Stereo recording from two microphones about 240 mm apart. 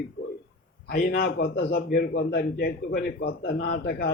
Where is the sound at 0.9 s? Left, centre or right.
Left.